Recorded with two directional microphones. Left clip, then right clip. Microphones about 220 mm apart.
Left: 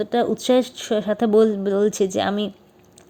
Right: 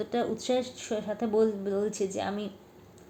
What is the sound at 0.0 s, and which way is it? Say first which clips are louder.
Speech: left 9 dB; 35° left (ahead or behind).